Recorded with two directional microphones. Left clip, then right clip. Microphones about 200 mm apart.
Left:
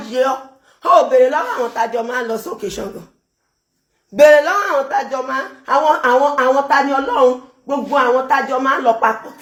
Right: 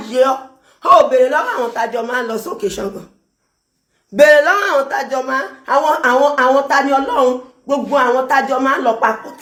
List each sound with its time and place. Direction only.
0.0 s speech: 20° right (ahead or behind)
4.1 s speech: 15° right (ahead or behind)